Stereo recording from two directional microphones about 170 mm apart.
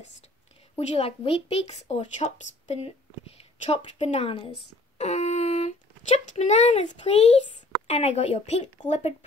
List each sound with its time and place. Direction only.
0.7 s a woman's voice: 35° left (ahead or behind)